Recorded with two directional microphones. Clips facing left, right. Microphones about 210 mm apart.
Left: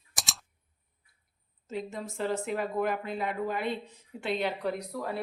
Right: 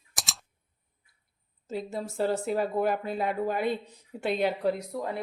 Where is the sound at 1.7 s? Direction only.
35° right (ahead or behind).